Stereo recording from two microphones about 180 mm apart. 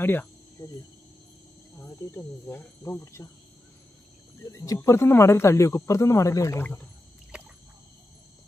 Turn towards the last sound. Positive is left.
turn(degrees=-5)  # may be behind; listen again after turning